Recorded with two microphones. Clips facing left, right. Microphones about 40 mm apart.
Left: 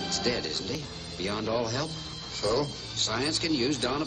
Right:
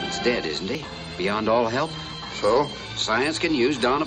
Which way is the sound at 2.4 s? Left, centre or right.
Right.